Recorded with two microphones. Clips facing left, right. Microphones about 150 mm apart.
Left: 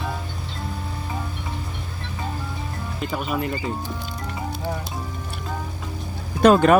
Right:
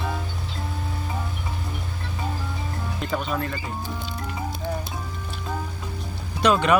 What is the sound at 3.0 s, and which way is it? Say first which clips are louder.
Speech: left 1 dB; 5° left (ahead or behind).